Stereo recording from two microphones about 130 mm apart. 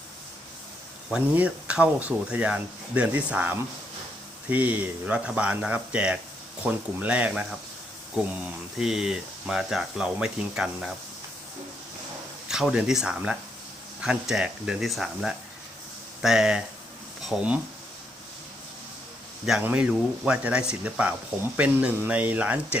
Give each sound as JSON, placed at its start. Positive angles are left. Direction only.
{"t": 1.1, "sound": "speech", "side_deg": -10}
{"t": 8.8, "sound": "speech", "side_deg": -5}
{"t": 12.5, "sound": "speech", "side_deg": -5}
{"t": 19.5, "sound": "speech", "side_deg": -10}